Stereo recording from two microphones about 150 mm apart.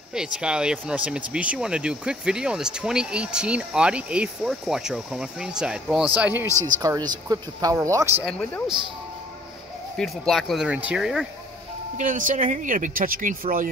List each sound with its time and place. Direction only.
0.1 s speech: 5° right (ahead or behind)
6.8 s speech: 25° right (ahead or behind)
8.2 s speech: centre (ahead or behind)
9.9 s speech: centre (ahead or behind)
12.0 s speech: 60° right (ahead or behind)